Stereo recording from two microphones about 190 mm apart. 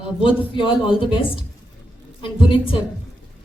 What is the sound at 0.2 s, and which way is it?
Speech, 25° left (ahead or behind).